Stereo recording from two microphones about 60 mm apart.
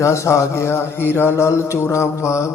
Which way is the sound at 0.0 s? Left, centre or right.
Left.